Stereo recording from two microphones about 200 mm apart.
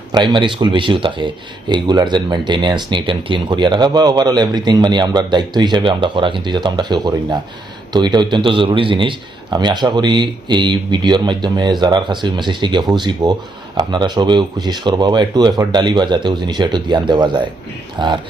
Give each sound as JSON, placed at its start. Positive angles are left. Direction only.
{"t": 0.1, "sound": "speech", "side_deg": -25}